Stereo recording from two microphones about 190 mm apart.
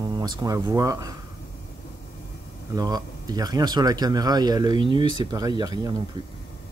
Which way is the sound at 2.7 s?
20° right (ahead or behind).